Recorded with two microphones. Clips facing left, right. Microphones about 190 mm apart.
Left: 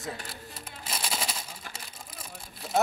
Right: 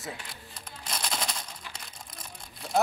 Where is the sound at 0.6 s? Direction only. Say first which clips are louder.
Right 1 dB; 5° left (ahead or behind).